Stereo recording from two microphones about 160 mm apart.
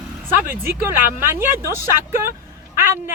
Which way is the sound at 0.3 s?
15° right (ahead or behind).